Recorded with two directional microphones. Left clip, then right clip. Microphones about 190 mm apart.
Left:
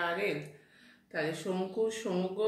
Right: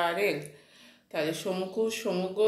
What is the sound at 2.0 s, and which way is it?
Speech, 15° right (ahead or behind).